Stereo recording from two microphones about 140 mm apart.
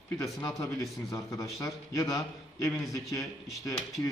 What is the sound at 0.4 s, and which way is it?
A man's voice, 25° left (ahead or behind).